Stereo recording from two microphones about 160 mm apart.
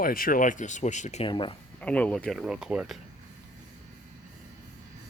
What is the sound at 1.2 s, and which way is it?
Speech, 30° left (ahead or behind).